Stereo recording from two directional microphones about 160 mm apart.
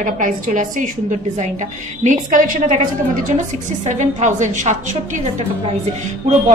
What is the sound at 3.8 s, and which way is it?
Speech, 50° right (ahead or behind).